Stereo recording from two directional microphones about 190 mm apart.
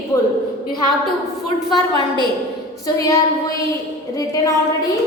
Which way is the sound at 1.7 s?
25° left (ahead or behind).